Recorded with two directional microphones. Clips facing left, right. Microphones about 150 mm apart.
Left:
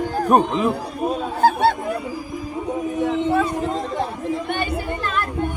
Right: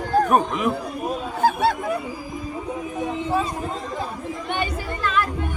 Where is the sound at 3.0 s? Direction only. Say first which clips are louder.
Left 4 dB; 65° left (ahead or behind).